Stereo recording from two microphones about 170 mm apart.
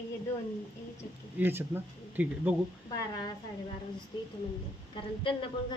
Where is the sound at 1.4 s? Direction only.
10° right (ahead or behind).